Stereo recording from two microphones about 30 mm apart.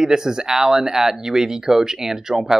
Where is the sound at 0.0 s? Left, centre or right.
Right.